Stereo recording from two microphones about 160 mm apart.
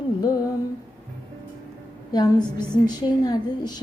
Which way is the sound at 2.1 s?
25° left (ahead or behind).